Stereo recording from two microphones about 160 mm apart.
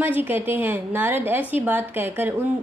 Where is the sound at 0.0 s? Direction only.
10° right (ahead or behind).